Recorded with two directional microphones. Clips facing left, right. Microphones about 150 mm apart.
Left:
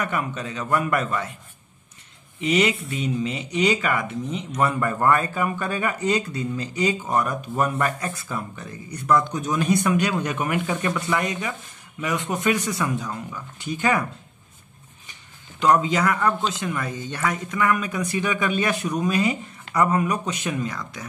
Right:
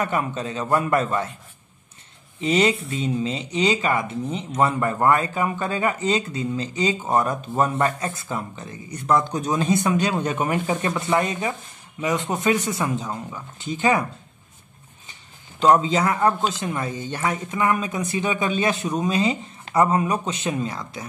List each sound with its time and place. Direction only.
0.0 s speech: 25° right (ahead or behind)
2.4 s speech: 30° right (ahead or behind)
15.6 s speech: 25° right (ahead or behind)